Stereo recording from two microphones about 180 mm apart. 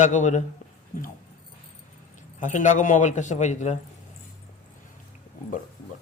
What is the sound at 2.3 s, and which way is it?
Speech, 45° left (ahead or behind).